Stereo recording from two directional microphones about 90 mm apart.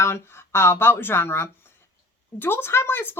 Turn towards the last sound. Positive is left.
turn(degrees=25)  # may be behind; listen again after turning